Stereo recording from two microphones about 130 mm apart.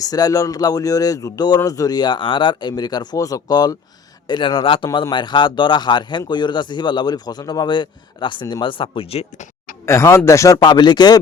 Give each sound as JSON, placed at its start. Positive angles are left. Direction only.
{"t": 0.0, "sound": "speech", "side_deg": 30}
{"t": 9.8, "sound": "speech", "side_deg": 20}